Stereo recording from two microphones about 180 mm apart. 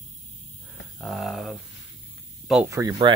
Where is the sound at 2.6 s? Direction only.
15° right (ahead or behind).